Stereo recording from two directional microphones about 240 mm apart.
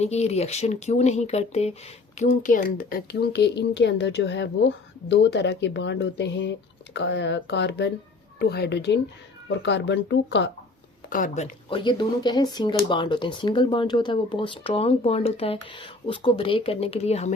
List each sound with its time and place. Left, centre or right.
0.0 s speech: left
11.1 s speech: left
11.7 s speech: centre